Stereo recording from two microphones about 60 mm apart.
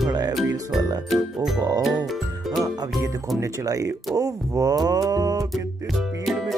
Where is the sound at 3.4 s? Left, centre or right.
Right.